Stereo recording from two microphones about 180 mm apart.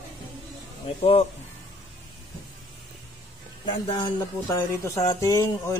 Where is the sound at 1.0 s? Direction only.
35° left (ahead or behind).